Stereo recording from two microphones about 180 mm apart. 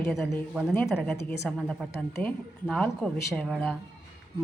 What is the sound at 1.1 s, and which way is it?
A woman's voice, 10° left (ahead or behind).